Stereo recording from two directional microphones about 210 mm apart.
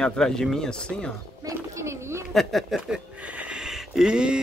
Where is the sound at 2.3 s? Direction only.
Centre (ahead or behind).